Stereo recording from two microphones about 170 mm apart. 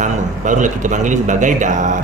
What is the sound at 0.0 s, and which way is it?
A man's voice, 45° right (ahead or behind).